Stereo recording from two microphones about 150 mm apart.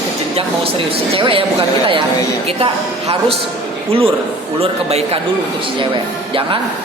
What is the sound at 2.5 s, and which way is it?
Speech, 40° right (ahead or behind).